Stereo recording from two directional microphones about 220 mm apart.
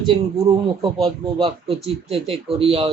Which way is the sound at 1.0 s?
25° right (ahead or behind).